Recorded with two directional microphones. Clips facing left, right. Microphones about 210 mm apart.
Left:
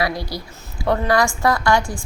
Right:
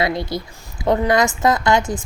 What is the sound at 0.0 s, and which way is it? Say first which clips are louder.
A woman's voice: right 3 dB; 25° right (ahead or behind).